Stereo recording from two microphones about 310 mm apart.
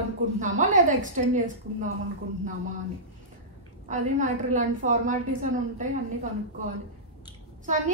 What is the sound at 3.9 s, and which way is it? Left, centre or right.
A woman's voice, right.